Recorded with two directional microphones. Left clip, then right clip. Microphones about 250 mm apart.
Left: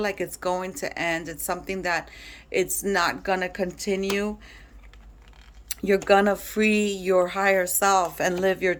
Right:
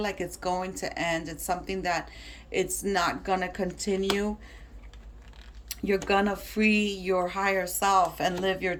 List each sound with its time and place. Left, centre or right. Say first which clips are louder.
0.0 s speech: left 4 dB; centre
5.6 s speech: left 6 dB; centre